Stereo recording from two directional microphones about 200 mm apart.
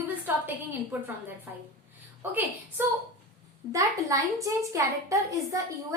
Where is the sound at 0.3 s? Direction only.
10° right (ahead or behind).